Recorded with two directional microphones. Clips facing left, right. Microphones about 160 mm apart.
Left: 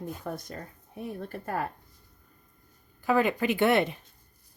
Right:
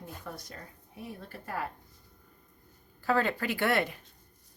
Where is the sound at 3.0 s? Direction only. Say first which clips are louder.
Left 4 dB; 15° left (ahead or behind).